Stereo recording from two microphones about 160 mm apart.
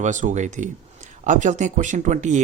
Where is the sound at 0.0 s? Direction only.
50° right (ahead or behind).